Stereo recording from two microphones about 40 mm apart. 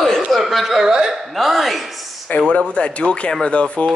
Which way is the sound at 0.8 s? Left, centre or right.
Centre.